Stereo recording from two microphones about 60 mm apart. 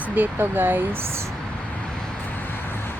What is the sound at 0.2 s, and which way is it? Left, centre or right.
Speech, right.